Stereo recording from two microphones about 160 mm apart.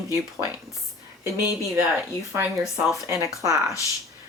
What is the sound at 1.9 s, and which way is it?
Speech, 15° right (ahead or behind).